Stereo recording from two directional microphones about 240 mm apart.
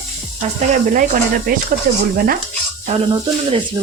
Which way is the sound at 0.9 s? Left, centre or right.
Right.